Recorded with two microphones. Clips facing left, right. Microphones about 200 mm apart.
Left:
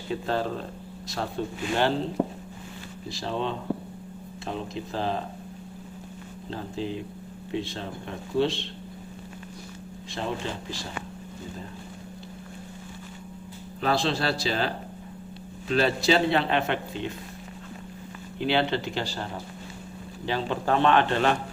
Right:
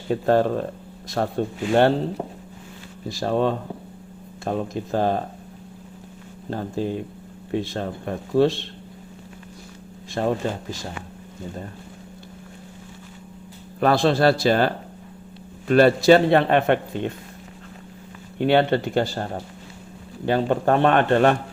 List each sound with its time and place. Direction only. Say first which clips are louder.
0.1 s a man's voice: right 9 dB; 55° right (ahead or behind)
3.2 s a man's voice: right 8 dB; 50° right (ahead or behind)
6.5 s a man's voice: right 6 dB; 50° right (ahead or behind)
10.2 s a man's voice: right 8 dB; 50° right (ahead or behind)
13.7 s a man's voice: right 7 dB; 55° right (ahead or behind)
18.3 s a man's voice: right 7 dB; 50° right (ahead or behind)